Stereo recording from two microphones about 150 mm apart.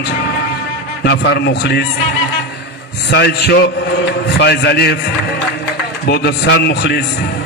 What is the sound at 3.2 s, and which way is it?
A man's voice, 90° left.